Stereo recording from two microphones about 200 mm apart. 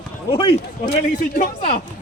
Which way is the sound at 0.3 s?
25° left (ahead or behind).